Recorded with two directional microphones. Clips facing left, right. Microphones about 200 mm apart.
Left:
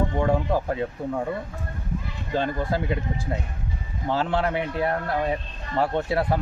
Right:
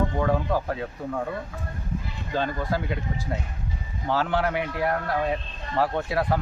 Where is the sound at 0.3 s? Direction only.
15° left (ahead or behind).